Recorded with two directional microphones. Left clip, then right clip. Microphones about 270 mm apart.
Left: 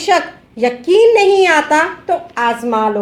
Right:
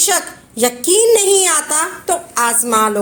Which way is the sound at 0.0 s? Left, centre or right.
Right.